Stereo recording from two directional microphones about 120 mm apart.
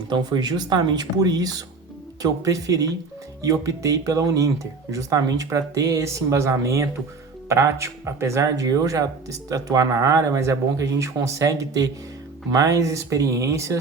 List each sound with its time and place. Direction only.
0.1 s speech: 35° right (ahead or behind)